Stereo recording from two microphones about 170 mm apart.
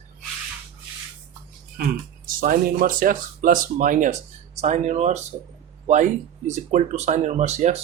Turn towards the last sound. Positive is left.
turn(degrees=-40)  # may be behind; listen again after turning